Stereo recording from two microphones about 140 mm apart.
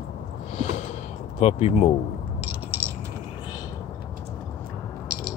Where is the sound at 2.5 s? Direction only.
15° right (ahead or behind).